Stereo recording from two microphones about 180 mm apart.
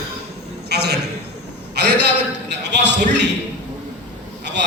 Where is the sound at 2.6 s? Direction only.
75° right (ahead or behind).